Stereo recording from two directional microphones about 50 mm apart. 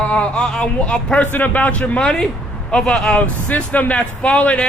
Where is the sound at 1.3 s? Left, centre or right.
Left; by 3.2 s centre.